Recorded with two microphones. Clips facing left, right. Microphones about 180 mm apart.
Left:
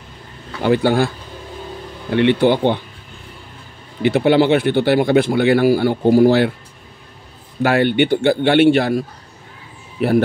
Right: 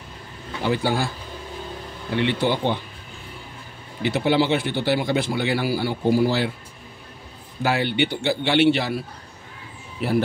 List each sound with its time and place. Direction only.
0.7 s speech: 60° left (ahead or behind)
2.1 s speech: 60° left (ahead or behind)
4.0 s speech: 60° left (ahead or behind)
7.6 s speech: 55° left (ahead or behind)
10.0 s speech: 60° left (ahead or behind)